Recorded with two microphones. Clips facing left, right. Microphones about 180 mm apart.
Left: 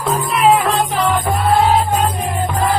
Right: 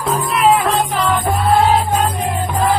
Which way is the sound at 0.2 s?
Centre (ahead or behind).